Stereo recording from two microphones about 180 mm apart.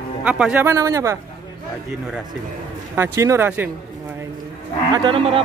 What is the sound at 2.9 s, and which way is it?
Speech, 15° right (ahead or behind).